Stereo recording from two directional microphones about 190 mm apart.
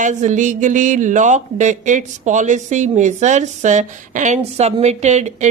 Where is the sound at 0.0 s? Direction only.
40° right (ahead or behind).